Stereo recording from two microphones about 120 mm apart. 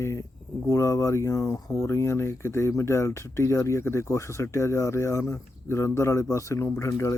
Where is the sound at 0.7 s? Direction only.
25° left (ahead or behind).